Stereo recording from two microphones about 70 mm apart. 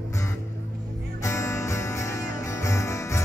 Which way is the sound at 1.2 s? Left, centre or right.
Left.